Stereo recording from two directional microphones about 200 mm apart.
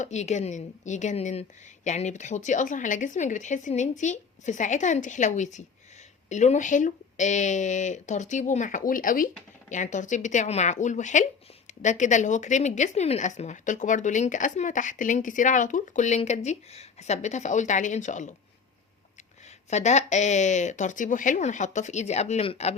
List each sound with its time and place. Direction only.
0.0 s speech: 35° left (ahead or behind)
19.5 s speech: 35° left (ahead or behind)